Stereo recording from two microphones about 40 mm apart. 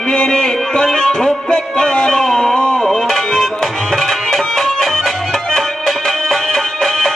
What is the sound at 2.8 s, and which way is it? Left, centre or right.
Music, centre.